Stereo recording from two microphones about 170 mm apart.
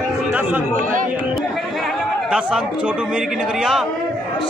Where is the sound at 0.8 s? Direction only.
50° right (ahead or behind).